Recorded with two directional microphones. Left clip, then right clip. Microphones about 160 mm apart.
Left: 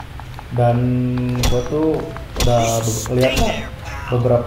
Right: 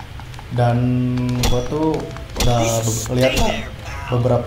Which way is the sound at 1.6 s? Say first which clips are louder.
Left 2 dB; 20° right (ahead or behind).